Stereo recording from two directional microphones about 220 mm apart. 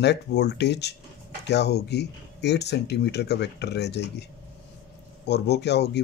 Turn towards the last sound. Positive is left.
turn(degrees=50)  # may be behind; listen again after turning